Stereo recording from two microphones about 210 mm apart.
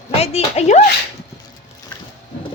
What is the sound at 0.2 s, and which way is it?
Speech, 30° left (ahead or behind).